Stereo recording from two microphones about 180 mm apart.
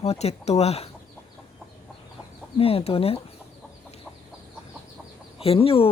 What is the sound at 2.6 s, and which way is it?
Speech, 35° left (ahead or behind).